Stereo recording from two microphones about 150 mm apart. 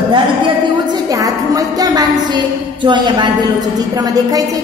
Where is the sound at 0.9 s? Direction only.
25° right (ahead or behind).